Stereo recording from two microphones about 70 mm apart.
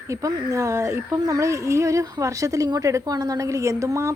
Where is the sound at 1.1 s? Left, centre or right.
Right.